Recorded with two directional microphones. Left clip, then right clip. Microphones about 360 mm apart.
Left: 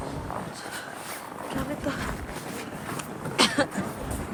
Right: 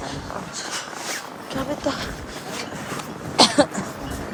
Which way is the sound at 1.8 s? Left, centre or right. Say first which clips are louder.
Right 5 dB; centre.